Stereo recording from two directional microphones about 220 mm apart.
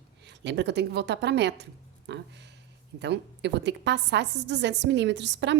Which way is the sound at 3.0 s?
50° right (ahead or behind).